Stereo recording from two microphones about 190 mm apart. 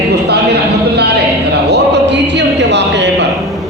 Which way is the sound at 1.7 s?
65° right (ahead or behind).